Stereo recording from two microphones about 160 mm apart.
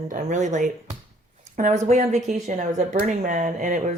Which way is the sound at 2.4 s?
50° right (ahead or behind).